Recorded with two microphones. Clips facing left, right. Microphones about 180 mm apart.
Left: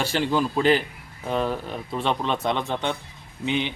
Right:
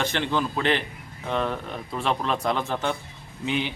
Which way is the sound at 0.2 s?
5° left (ahead or behind).